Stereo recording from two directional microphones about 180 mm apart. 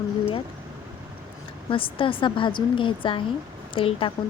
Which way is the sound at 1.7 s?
30° left (ahead or behind).